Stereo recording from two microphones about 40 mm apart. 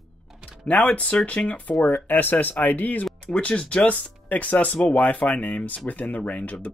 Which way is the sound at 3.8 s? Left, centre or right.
Left.